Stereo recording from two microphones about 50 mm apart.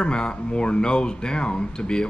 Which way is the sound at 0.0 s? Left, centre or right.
Centre.